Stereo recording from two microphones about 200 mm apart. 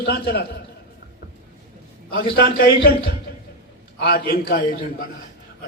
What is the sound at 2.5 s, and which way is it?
A man's voice, 50° left (ahead or behind).